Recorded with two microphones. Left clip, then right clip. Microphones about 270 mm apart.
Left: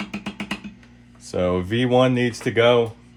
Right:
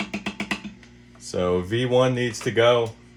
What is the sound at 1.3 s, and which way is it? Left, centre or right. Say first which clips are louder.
Speech: left 1 dB; left.